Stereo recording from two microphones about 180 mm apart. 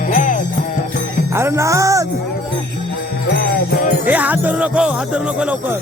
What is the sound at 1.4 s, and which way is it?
Music, 15° right (ahead or behind).